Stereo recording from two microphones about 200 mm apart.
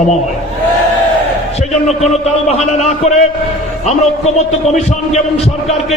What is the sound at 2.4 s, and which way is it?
Speech, 35° left (ahead or behind).